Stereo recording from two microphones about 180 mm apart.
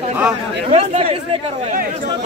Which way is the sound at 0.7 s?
35° right (ahead or behind).